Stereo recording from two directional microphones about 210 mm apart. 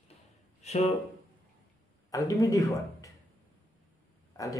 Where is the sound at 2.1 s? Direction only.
15° left (ahead or behind).